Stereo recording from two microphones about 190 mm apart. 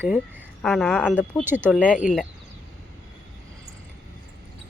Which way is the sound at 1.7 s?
5° left (ahead or behind).